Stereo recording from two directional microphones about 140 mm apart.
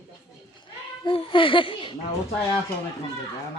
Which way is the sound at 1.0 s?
40° left (ahead or behind).